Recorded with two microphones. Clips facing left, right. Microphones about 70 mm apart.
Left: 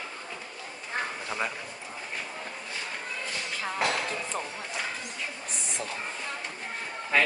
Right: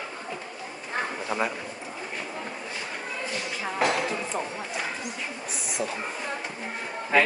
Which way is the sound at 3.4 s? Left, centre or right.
Centre.